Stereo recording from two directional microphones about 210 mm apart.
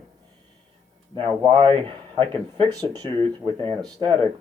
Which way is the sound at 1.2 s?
25° right (ahead or behind).